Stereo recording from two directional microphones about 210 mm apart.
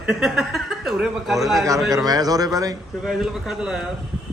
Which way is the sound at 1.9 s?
15° right (ahead or behind).